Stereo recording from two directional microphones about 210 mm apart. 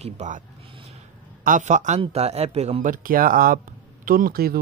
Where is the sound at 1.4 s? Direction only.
35° right (ahead or behind).